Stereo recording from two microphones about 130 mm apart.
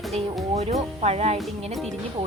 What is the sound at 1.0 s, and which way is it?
Speech, 55° right (ahead or behind).